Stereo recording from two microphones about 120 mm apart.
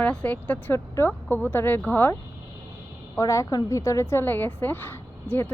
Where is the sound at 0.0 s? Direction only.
10° left (ahead or behind).